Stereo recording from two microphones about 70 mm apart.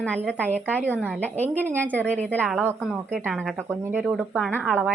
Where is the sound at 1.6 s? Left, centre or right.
Right.